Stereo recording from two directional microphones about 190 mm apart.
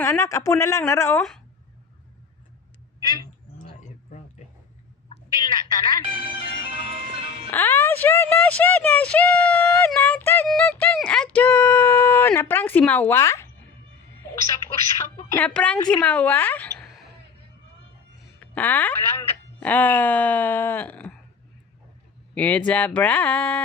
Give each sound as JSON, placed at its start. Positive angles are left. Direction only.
{"t": 0.0, "sound": "speech", "side_deg": 15}
{"t": 3.0, "sound": "cat", "side_deg": 20}
{"t": 5.0, "sound": "telephone", "side_deg": 25}
{"t": 6.1, "sound": "music", "side_deg": -30}
{"t": 7.5, "sound": "a woman's voice", "side_deg": 10}
{"t": 10.5, "sound": "a sound", "side_deg": 5}
{"t": 15.4, "sound": "speech", "side_deg": 5}
{"t": 18.3, "sound": "speech", "side_deg": 10}
{"t": 22.4, "sound": "speech", "side_deg": 5}